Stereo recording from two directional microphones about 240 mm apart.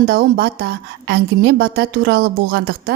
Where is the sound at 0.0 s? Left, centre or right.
Right.